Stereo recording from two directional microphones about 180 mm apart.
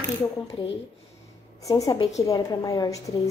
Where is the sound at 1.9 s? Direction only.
20° left (ahead or behind).